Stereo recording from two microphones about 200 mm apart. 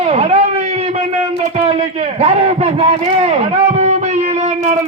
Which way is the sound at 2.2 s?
30° right (ahead or behind).